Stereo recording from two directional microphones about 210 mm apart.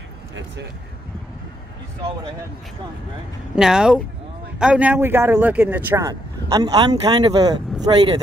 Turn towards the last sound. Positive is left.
turn(degrees=-20)  # may be behind; listen again after turning